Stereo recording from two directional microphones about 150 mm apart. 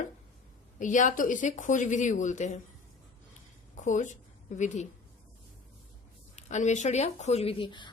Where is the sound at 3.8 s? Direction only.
55° left (ahead or behind).